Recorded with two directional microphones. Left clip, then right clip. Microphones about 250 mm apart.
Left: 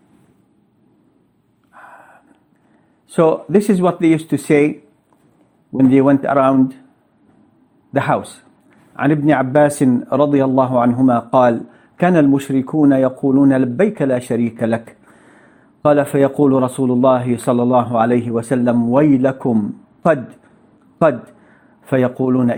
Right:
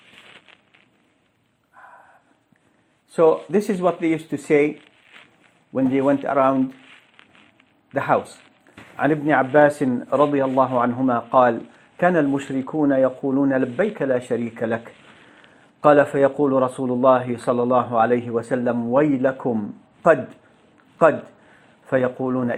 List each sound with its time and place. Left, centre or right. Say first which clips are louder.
1.7 s a sound: left 6 dB; left
3.1 s speech: left 3 dB; left
5.9 s speech: left 6 dB; left
7.9 s speech: left 3 dB; left
15.8 s speech: left 1 dB; left